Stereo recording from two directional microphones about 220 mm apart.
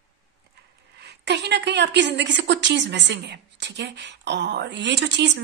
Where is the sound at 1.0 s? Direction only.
50° right (ahead or behind).